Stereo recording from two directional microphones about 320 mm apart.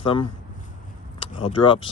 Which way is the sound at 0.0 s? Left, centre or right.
Centre.